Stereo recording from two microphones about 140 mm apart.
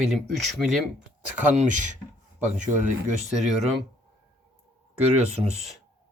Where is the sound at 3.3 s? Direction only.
5° right (ahead or behind).